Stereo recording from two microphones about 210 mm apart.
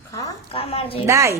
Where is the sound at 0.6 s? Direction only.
25° left (ahead or behind).